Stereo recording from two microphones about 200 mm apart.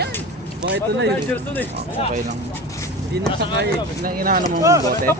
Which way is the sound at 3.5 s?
50° right (ahead or behind).